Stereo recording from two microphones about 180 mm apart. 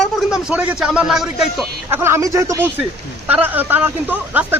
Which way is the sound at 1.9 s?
15° right (ahead or behind).